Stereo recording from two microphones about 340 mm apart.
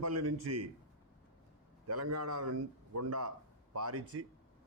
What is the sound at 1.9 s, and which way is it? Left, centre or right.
A man's voice, right.